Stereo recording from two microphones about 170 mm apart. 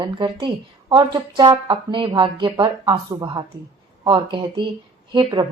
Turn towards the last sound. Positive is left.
turn(degrees=-25)  # may be behind; listen again after turning